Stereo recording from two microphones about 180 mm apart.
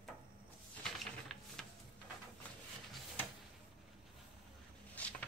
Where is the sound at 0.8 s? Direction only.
Centre (ahead or behind).